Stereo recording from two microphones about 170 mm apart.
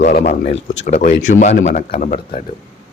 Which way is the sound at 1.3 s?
50° left (ahead or behind).